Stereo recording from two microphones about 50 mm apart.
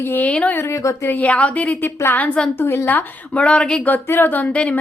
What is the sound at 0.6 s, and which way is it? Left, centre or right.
Speech, left.